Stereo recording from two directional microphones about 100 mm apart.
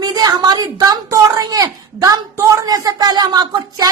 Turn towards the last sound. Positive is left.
turn(degrees=-40)  # may be behind; listen again after turning